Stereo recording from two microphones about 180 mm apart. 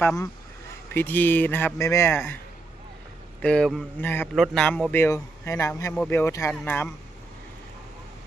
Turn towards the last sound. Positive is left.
turn(degrees=10)  # may be behind; listen again after turning